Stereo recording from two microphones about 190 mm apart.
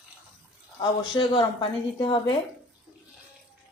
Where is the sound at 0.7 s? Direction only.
25° left (ahead or behind).